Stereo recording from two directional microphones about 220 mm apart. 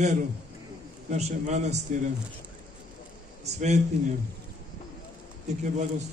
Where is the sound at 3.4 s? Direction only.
30° right (ahead or behind).